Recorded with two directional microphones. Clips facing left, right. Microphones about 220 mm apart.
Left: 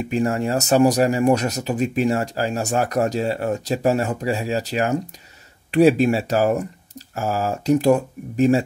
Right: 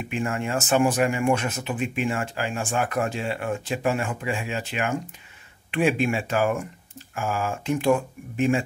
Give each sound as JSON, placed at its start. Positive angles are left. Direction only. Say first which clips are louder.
{"t": 0.0, "sound": "speech", "louder": "left 7 dB", "side_deg": 40}